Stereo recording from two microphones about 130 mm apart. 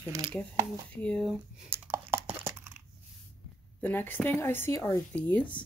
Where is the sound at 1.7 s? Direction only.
20° right (ahead or behind).